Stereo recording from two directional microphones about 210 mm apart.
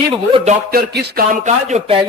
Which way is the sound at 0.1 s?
25° right (ahead or behind).